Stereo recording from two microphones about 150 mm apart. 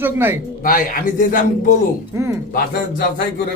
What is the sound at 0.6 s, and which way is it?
Speech, 70° left (ahead or behind).